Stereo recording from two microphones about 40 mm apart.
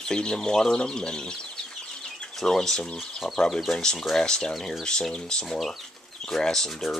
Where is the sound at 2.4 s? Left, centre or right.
Centre.